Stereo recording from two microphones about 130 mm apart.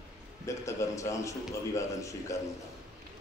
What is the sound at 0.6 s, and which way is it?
A man's voice, 25° left (ahead or behind).